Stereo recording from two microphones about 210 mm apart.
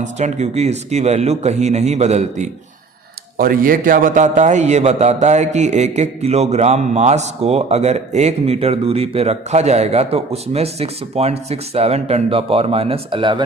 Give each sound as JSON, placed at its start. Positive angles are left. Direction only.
{"t": 0.0, "sound": "a man's voice", "side_deg": -35}